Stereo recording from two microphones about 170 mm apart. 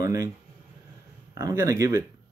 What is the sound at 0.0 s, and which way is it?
Speech, 20° right (ahead or behind).